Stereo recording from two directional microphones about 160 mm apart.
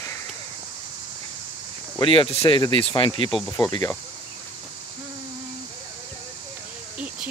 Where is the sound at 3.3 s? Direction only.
Centre (ahead or behind).